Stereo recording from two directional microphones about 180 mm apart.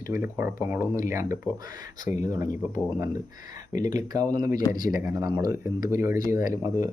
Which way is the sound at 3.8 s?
20° right (ahead or behind).